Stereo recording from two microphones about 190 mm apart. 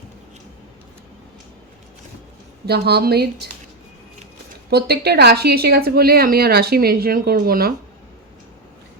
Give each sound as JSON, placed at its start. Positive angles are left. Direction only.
{"t": 2.6, "sound": "speech", "side_deg": -60}
{"t": 4.7, "sound": "a woman's voice", "side_deg": -55}